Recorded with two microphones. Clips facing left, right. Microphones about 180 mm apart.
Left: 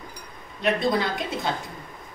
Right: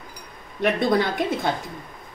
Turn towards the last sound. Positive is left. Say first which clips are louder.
# right 4 dB
turn(degrees=-55)  # may be behind; listen again after turning